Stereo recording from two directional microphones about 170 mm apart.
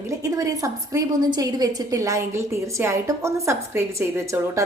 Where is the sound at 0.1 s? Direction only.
20° right (ahead or behind).